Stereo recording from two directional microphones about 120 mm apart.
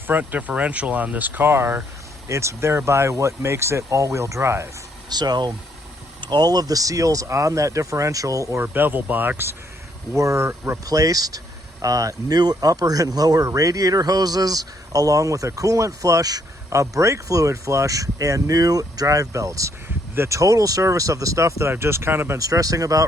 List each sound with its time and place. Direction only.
0.1 s speech: 15° right (ahead or behind)
5.0 s speech: 35° right (ahead or behind)
8.6 s speech: 15° right (ahead or behind)
22.4 s speech: 30° right (ahead or behind)